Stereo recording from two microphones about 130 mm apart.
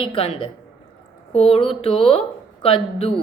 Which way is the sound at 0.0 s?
40° left (ahead or behind).